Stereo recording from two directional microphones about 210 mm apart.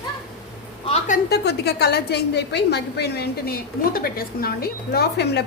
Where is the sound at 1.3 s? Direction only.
50° left (ahead or behind).